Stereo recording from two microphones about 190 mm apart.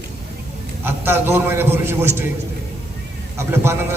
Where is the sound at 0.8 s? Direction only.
10° right (ahead or behind).